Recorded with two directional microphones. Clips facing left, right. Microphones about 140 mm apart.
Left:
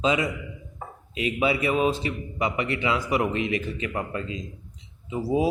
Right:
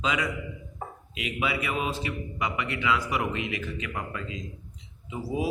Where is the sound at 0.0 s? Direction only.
25° left (ahead or behind).